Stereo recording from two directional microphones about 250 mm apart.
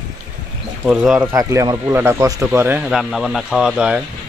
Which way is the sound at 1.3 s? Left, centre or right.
Centre.